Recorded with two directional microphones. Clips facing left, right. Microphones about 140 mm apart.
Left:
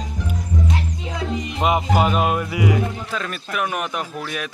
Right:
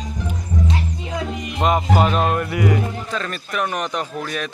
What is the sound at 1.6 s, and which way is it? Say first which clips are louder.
Speech: right 1 dB; 5° left (ahead or behind).